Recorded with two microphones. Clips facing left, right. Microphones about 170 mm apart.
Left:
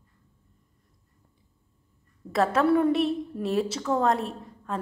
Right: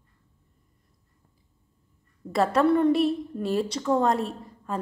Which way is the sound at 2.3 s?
Centre (ahead or behind).